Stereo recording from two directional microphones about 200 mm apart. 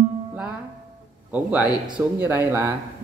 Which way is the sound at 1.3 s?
5° right (ahead or behind).